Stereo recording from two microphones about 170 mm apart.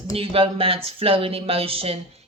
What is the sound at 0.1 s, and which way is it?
Speech, 35° right (ahead or behind).